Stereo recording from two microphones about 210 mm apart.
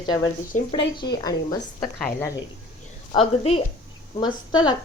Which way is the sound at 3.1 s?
25° left (ahead or behind).